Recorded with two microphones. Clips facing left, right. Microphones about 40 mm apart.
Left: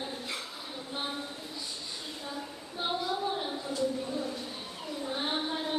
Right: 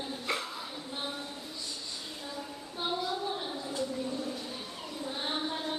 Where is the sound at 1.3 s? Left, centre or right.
Centre.